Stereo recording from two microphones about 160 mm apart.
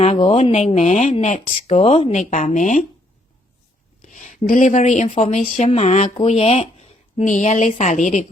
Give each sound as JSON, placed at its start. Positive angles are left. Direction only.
{"t": 0.0, "sound": "speech", "side_deg": 40}
{"t": 2.3, "sound": "speech", "side_deg": 50}
{"t": 4.1, "sound": "speech", "side_deg": 50}